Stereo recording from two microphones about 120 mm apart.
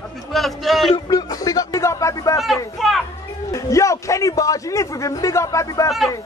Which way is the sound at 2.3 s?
Centre (ahead or behind).